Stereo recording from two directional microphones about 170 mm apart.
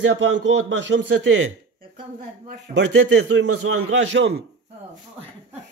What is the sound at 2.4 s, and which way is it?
Speech, 90° right.